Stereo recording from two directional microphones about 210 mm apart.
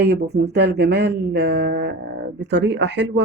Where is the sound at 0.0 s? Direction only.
50° right (ahead or behind).